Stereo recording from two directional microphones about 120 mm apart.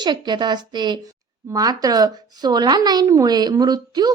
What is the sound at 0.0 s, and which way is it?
Speech, 40° right (ahead or behind).